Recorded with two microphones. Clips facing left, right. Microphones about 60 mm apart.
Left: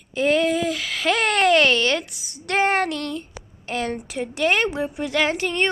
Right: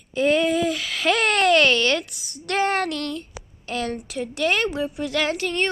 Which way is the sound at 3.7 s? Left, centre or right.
Centre.